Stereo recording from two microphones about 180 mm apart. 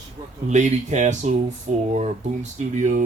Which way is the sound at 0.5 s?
40° right (ahead or behind).